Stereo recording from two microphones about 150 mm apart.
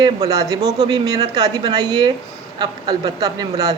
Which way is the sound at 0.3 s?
25° right (ahead or behind).